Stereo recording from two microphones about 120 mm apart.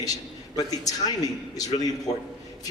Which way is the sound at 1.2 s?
30° left (ahead or behind).